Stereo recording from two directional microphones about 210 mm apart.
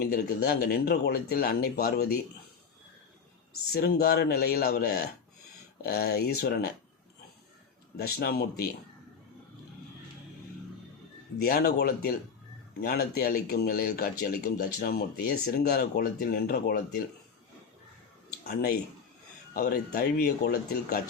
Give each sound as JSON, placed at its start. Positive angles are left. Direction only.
{"t": 0.4, "sound": "speech", "side_deg": 50}
{"t": 3.7, "sound": "speech", "side_deg": 45}
{"t": 7.9, "sound": "speech", "side_deg": 45}
{"t": 11.3, "sound": "speech", "side_deg": 45}
{"t": 18.4, "sound": "speech", "side_deg": 50}